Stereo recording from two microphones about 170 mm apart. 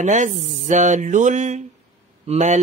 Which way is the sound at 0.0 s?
45° right (ahead or behind).